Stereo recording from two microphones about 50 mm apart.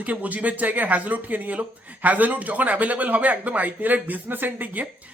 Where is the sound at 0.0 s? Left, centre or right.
Right.